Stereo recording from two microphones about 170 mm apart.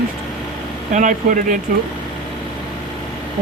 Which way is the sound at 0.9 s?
50° right (ahead or behind).